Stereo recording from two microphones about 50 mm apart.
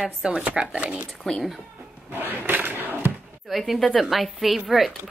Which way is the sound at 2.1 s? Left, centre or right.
Right.